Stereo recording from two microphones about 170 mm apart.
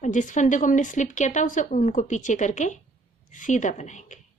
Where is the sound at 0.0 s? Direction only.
45° left (ahead or behind).